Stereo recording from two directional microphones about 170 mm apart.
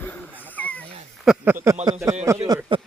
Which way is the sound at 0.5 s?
10° left (ahead or behind).